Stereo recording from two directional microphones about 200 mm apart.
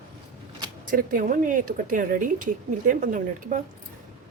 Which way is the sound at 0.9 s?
40° right (ahead or behind).